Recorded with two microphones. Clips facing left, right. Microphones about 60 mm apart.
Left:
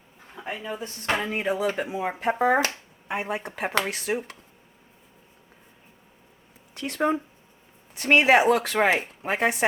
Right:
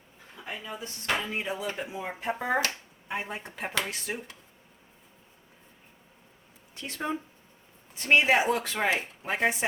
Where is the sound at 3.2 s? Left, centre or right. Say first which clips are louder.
Left 7 dB; left.